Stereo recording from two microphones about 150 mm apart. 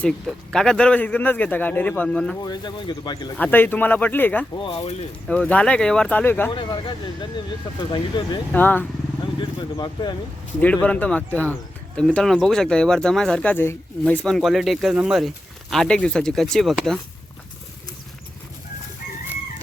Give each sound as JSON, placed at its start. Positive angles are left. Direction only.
{"t": 0.3, "sound": "a man's voice", "side_deg": 5}
{"t": 2.4, "sound": "speech", "side_deg": 25}
{"t": 3.3, "sound": "a man's voice", "side_deg": 10}
{"t": 4.5, "sound": "speech", "side_deg": 35}
{"t": 5.3, "sound": "a man's voice", "side_deg": 10}
{"t": 6.5, "sound": "speech", "side_deg": 30}
{"t": 8.5, "sound": "a man's voice", "side_deg": 10}
{"t": 9.4, "sound": "speech", "side_deg": 30}
{"t": 10.6, "sound": "a man's voice", "side_deg": 10}